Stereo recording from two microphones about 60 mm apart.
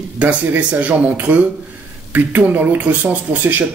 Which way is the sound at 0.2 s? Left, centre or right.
Right.